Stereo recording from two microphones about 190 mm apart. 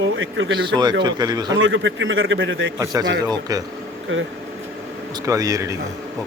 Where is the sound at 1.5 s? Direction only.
85° right.